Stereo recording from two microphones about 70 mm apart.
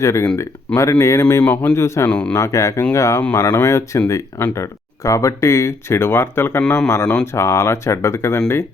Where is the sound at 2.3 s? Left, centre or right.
Left.